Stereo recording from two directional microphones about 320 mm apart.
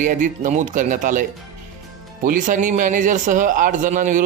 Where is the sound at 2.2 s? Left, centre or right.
Right.